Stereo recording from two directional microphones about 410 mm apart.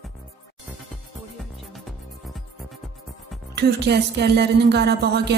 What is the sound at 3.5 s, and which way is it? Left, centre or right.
Speech, right.